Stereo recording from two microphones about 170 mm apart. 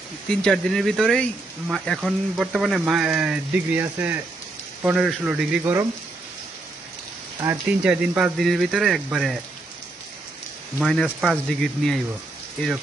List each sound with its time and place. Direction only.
0.3 s speech: 5° left (ahead or behind)
7.4 s speech: 10° right (ahead or behind)
10.8 s speech: centre (ahead or behind)